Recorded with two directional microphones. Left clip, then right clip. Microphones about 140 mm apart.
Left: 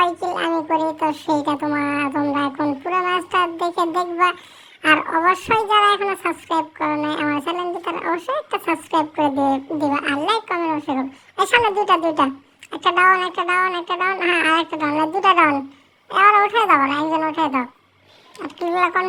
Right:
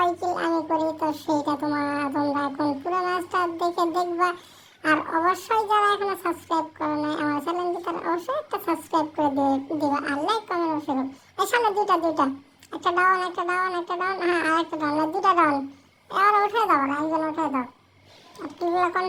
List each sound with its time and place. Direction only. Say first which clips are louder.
0.0 s music: left 4 dB; 45° left (ahead or behind)
0.8 s a woman's voice: left 5 dB; 45° left (ahead or behind)